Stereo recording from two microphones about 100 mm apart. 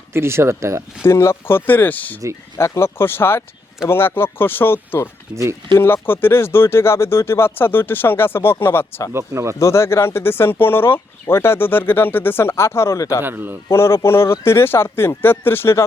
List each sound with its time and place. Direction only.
0.1 s speech: 25° right (ahead or behind)
1.0 s speech: 25° left (ahead or behind)
9.1 s speech: 30° right (ahead or behind)
9.6 s speech: 30° left (ahead or behind)
13.2 s speech: 20° right (ahead or behind)
13.7 s speech: 25° left (ahead or behind)